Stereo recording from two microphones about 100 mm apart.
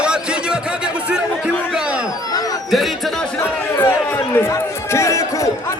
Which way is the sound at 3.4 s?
30° left (ahead or behind).